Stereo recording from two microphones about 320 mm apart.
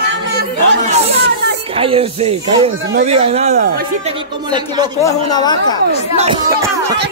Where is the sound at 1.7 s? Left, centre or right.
Centre.